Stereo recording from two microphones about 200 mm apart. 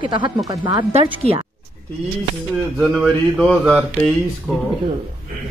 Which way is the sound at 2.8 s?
Centre (ahead or behind).